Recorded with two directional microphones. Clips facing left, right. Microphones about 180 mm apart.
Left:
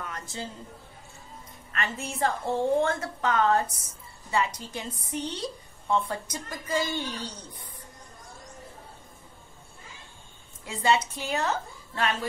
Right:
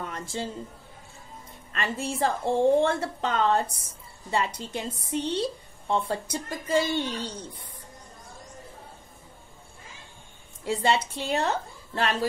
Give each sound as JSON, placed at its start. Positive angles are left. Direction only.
{"t": 0.0, "sound": "a woman's voice", "side_deg": -30}
{"t": 1.7, "sound": "a woman's voice", "side_deg": -30}
{"t": 10.6, "sound": "a woman's voice", "side_deg": -30}